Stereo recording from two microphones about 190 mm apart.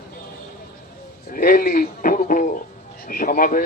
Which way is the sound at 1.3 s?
50° left (ahead or behind).